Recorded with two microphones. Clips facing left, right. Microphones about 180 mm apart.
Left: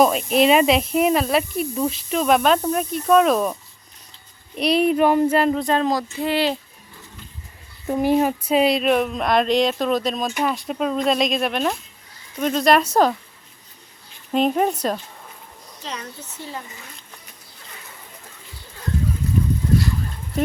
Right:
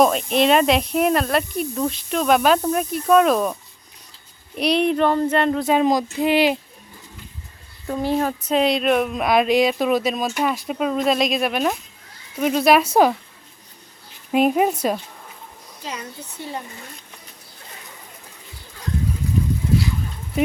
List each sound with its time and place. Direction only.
0.0 s speech: centre (ahead or behind)
5.7 s speech: 15° right (ahead or behind)
7.9 s speech: 15° left (ahead or behind); by 13.1 s 10° right (ahead or behind)
14.3 s speech: 10° right (ahead or behind)